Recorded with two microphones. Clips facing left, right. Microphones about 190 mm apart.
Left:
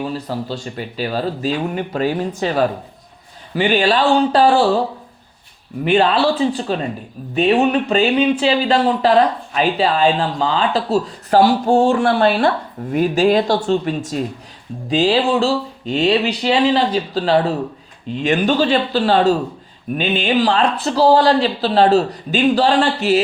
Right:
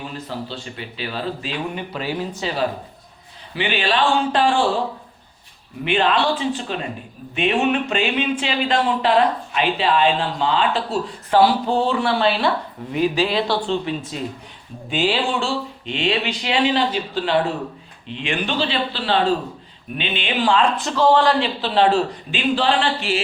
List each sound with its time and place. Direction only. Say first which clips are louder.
0.0 s speech: left 6 dB; 40° left (ahead or behind)
5.8 s speech: left 4 dB; 40° left (ahead or behind)